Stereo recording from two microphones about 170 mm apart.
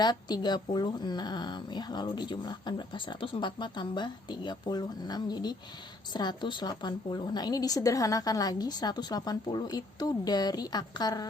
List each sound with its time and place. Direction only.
0.0 s speech: 25° left (ahead or behind)